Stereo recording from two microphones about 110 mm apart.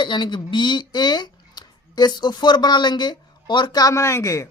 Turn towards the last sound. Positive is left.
turn(degrees=30)  # may be behind; listen again after turning